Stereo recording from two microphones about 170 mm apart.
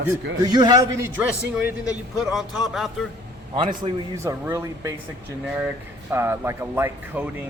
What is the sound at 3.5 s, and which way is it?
Speech, 30° right (ahead or behind).